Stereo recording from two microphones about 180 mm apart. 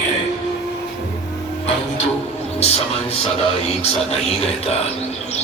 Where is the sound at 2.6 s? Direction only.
35° left (ahead or behind).